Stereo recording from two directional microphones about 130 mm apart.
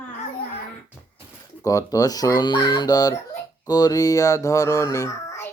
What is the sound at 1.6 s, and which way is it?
Speech, 25° left (ahead or behind).